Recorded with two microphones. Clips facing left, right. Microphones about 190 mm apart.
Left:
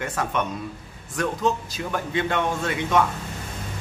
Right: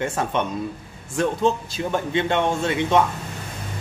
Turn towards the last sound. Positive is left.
turn(degrees=-25)  # may be behind; listen again after turning